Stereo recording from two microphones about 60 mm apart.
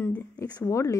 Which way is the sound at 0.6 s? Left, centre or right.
Left.